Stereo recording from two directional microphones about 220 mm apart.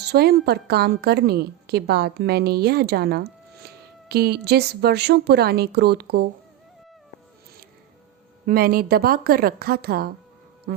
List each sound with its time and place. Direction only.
0.0 s a woman's voice: 45° right (ahead or behind)
8.4 s a woman's voice: 40° right (ahead or behind)